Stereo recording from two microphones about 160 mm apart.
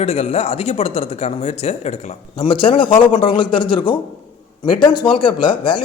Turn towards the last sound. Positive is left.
turn(degrees=30)  # may be behind; listen again after turning